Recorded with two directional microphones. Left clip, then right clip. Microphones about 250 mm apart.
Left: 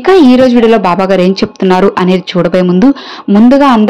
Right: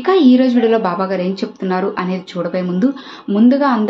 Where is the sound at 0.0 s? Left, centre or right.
Left.